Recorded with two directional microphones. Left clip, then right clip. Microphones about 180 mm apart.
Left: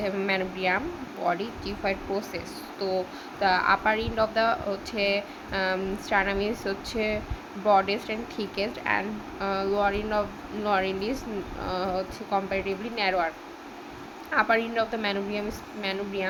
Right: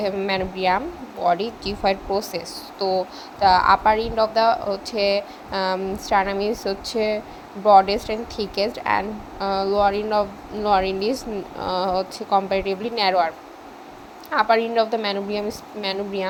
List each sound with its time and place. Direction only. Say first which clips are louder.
0.0 s a woman's voice: right 4 dB; 15° right (ahead or behind)